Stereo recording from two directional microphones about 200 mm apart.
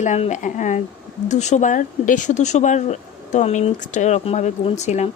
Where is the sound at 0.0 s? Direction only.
35° left (ahead or behind).